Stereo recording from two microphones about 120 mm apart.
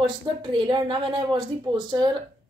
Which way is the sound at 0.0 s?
40° right (ahead or behind).